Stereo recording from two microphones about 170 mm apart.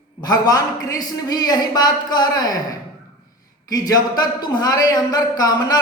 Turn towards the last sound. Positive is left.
turn(degrees=20)  # may be behind; listen again after turning